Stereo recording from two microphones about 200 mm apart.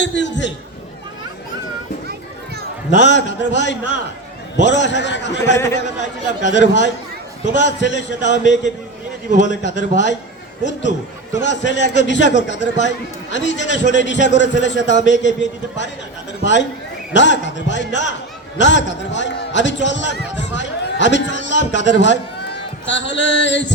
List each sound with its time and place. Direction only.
0.0 s chatter: 60° left (ahead or behind)
2.9 s a man's voice: 60° left (ahead or behind)